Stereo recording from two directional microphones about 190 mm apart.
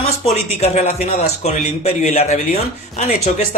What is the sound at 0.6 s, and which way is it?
A man's voice, 35° left (ahead or behind).